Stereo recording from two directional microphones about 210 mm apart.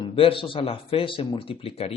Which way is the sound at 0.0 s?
25° left (ahead or behind).